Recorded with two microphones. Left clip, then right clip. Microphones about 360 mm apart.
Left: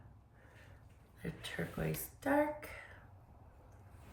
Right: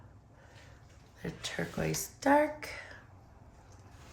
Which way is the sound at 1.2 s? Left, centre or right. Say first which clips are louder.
Right 5 dB; centre.